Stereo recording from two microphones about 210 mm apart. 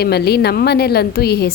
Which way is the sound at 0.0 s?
50° left (ahead or behind).